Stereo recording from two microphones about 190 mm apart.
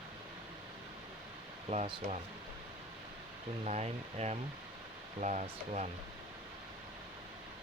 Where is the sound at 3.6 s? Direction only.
35° right (ahead or behind).